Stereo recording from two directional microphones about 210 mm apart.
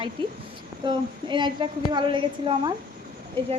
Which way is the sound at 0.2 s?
25° right (ahead or behind).